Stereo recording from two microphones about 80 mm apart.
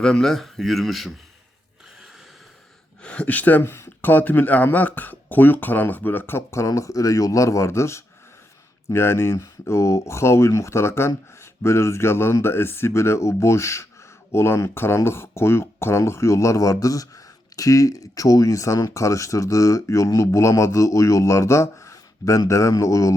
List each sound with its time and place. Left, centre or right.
0.0 s speech: centre
3.0 s speech: centre; by 23.1 s left